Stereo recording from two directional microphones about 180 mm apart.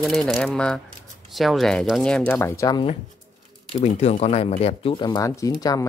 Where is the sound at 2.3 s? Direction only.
15° left (ahead or behind).